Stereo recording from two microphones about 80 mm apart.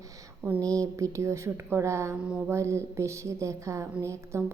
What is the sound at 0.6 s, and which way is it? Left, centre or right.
A woman's voice, right.